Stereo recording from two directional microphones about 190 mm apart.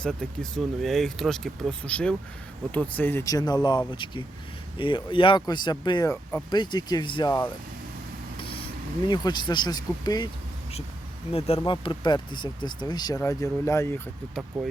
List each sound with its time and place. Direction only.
0.0 s speech: centre (ahead or behind); by 7.3 s 25° left (ahead or behind)
8.4 s vehicle: 30° left (ahead or behind)
9.0 s speech: 25° left (ahead or behind)
11.3 s speech: 30° left (ahead or behind); by 14.0 s 15° left (ahead or behind)